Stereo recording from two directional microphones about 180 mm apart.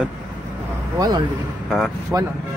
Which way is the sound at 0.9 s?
20° right (ahead or behind).